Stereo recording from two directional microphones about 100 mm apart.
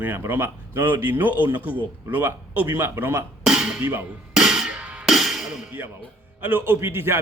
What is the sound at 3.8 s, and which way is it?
Speech, 20° right (ahead or behind).